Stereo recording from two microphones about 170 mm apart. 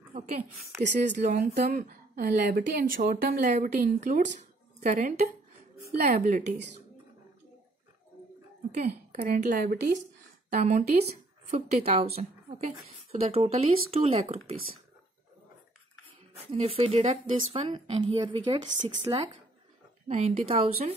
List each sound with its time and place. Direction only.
0.9 s a woman's voice: 50° right (ahead or behind)
9.1 s speech: 50° right (ahead or behind)
10.5 s speech: 45° right (ahead or behind)
16.5 s speech: 35° right (ahead or behind)
20.1 s speech: 35° right (ahead or behind)